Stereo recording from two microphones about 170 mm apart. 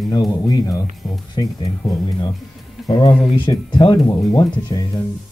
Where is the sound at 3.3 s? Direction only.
25° left (ahead or behind).